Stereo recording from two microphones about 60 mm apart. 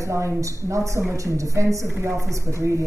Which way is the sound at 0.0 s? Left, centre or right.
Right.